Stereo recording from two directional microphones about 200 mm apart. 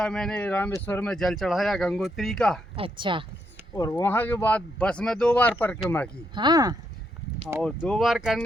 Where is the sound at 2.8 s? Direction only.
25° right (ahead or behind).